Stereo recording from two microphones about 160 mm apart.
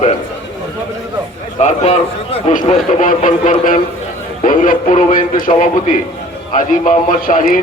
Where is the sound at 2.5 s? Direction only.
55° left (ahead or behind).